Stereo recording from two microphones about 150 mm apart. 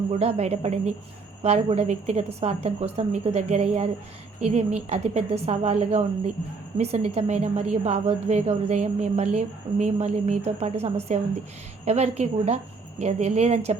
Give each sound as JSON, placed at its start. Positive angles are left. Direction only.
{"t": 0.1, "sound": "a woman's voice", "side_deg": -45}